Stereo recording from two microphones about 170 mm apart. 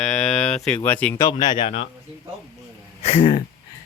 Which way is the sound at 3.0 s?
35° left (ahead or behind).